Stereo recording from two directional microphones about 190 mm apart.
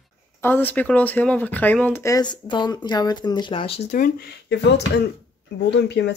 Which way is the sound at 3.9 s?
60° left (ahead or behind).